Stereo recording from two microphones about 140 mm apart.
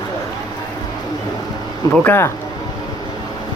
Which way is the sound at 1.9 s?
15° left (ahead or behind).